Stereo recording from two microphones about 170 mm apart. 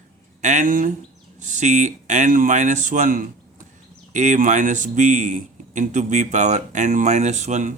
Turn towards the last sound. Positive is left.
turn(degrees=-45)  # may be behind; listen again after turning